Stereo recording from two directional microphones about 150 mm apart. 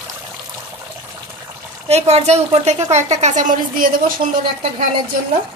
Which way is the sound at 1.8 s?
45° right (ahead or behind).